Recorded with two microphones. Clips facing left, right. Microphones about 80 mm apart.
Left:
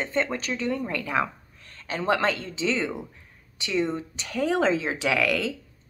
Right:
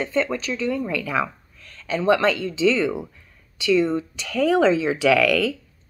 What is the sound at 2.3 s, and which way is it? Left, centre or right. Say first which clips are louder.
Speech: right 7 dB; left.